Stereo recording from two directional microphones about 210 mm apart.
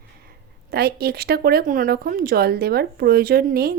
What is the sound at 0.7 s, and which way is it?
Speech, 45° right (ahead or behind).